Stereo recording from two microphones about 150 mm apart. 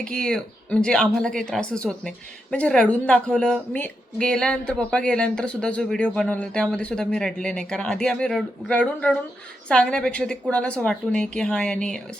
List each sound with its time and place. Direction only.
0.0 s speech: 5° left (ahead or behind)